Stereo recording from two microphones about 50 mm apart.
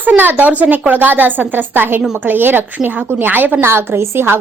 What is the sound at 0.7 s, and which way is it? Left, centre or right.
A woman's voice, right.